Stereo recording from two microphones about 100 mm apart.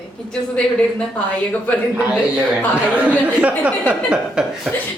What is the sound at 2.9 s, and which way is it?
Speech, 15° right (ahead or behind).